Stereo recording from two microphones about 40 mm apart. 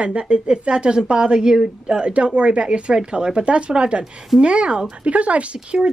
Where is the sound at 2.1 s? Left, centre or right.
Right.